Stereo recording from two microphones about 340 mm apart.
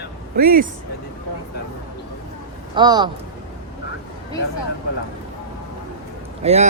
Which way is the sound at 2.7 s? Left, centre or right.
Centre.